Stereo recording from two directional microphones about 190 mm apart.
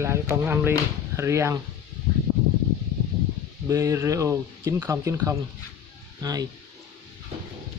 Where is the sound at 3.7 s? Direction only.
15° right (ahead or behind).